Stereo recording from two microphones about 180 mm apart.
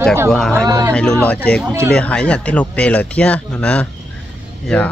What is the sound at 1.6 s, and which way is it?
Speech, 15° right (ahead or behind).